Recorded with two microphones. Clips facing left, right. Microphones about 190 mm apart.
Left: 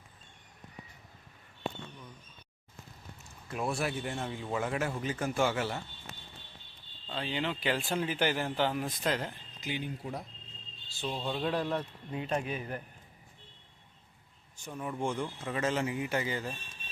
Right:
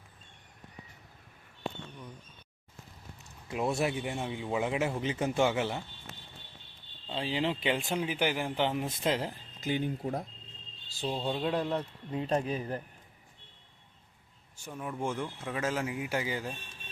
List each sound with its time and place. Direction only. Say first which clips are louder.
3.5 s speech: right 3 dB; 20° right (ahead or behind)
7.1 s speech: right 3 dB; 30° right (ahead or behind)
7.9 s speech: even; 10° right (ahead or behind)
9.6 s speech: right 6 dB; 45° right (ahead or behind)
10.9 s speech: right 3 dB; 30° right (ahead or behind)
11.3 s speech: right 1 dB; 20° right (ahead or behind)
12.1 s speech: right 3 dB; 30° right (ahead or behind)
14.6 s speech: left 1 dB; 5° right (ahead or behind)